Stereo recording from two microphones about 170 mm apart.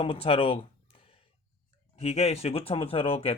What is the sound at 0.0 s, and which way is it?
Speech, 35° left (ahead or behind).